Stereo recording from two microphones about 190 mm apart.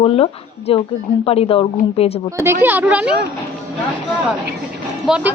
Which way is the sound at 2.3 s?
15° right (ahead or behind).